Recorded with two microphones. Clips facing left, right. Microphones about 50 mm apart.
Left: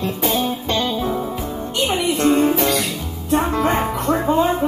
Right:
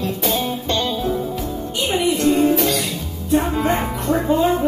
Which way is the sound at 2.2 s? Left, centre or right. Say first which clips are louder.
Left 2 dB; left.